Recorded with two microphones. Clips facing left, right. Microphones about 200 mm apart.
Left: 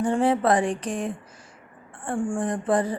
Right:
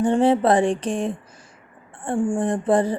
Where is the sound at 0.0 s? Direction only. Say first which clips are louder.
Right 4 dB; 25° right (ahead or behind).